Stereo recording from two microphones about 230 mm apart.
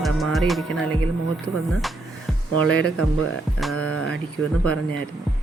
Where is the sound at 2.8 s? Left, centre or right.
Right.